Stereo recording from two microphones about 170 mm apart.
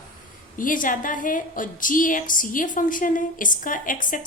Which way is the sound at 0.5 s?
50° left (ahead or behind).